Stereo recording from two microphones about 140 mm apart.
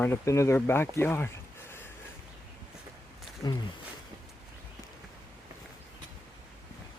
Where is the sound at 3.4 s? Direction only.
30° left (ahead or behind).